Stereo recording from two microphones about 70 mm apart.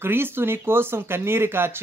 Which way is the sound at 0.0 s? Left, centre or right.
Right.